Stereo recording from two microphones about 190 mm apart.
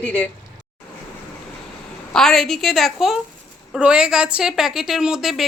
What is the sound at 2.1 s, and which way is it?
A woman's voice, centre (ahead or behind).